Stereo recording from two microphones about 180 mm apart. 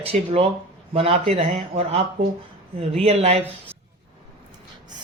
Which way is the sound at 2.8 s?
35° right (ahead or behind).